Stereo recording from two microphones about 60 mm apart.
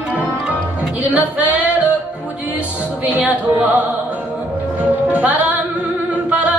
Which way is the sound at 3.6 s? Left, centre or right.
Right.